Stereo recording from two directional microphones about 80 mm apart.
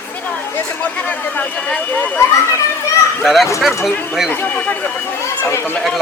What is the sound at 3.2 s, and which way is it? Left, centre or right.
Speech, centre.